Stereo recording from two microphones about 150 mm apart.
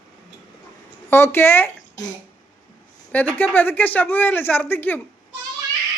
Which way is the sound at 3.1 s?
10° left (ahead or behind).